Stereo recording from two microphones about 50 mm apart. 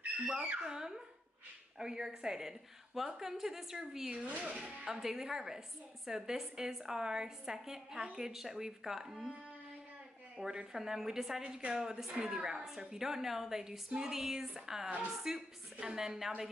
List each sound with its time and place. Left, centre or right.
0.4 s a woman's voice: centre
4.2 s speech: right
4.8 s a woman's voice: centre
10.3 s a woman's voice: centre